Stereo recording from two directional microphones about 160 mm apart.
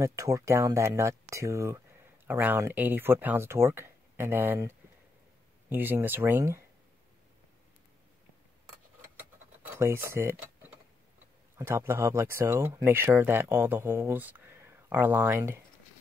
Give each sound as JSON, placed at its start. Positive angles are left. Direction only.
{"t": 0.0, "sound": "speech", "side_deg": -20}
{"t": 9.7, "sound": "speech", "side_deg": -15}